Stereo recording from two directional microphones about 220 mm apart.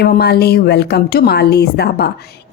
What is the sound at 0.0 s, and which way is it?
A woman's voice, 45° left (ahead or behind).